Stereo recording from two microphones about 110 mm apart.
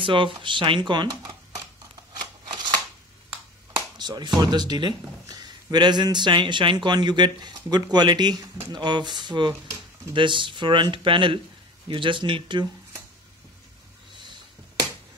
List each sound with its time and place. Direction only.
0.0 s speech: 50° right (ahead or behind)
3.7 s speech: 40° right (ahead or behind)
14.1 s sniff: 45° right (ahead or behind)